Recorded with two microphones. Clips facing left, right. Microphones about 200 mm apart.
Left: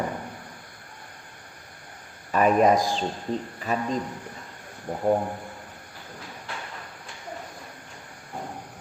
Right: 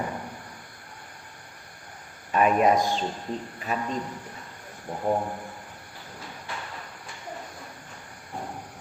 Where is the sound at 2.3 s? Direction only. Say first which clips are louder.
Left 2 dB; 40° left (ahead or behind).